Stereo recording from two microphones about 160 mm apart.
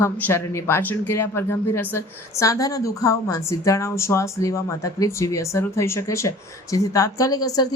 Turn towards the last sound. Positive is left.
turn(degrees=25)  # may be behind; listen again after turning